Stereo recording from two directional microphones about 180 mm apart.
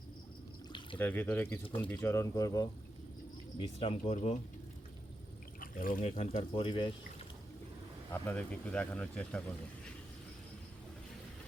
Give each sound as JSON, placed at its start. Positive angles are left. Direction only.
{"t": 0.9, "sound": "speech", "side_deg": 10}
{"t": 3.6, "sound": "speech", "side_deg": 30}
{"t": 5.5, "sound": "pour", "side_deg": 50}
{"t": 6.1, "sound": "speech", "side_deg": 35}
{"t": 8.1, "sound": "speech", "side_deg": 10}